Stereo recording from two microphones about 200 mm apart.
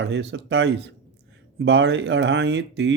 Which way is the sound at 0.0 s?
60° right (ahead or behind).